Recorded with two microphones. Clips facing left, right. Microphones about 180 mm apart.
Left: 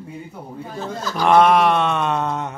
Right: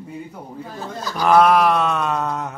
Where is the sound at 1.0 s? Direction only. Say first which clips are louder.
Left 1 dB; 10° right (ahead or behind).